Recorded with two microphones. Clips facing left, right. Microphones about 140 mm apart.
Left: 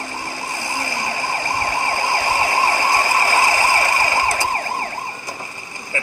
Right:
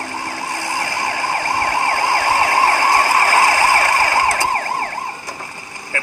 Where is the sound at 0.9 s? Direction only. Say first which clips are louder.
Right 4 dB; 65° right (ahead or behind).